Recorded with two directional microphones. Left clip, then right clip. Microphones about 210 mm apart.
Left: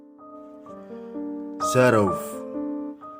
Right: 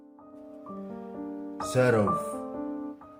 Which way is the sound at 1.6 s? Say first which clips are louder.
Left 6 dB; 40° left (ahead or behind).